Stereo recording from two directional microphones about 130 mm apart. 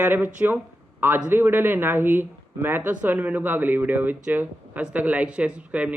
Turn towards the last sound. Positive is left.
turn(degrees=-10)  # may be behind; listen again after turning